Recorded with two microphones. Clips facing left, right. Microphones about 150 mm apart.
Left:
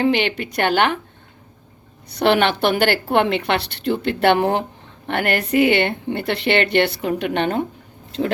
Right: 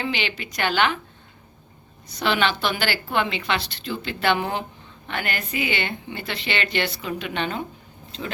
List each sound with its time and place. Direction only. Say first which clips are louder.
0.0 s a woman's voice: left 9 dB; 55° left (ahead or behind)
2.0 s a woman's voice: left 6 dB; 60° left (ahead or behind)